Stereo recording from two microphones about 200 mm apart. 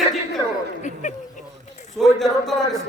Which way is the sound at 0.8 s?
40° left (ahead or behind).